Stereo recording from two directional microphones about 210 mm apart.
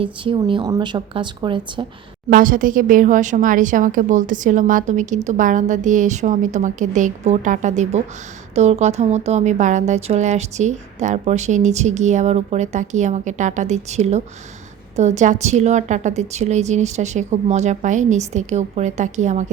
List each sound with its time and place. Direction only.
0.0 s a woman's voice: 25° right (ahead or behind)
2.3 s speech: 40° right (ahead or behind)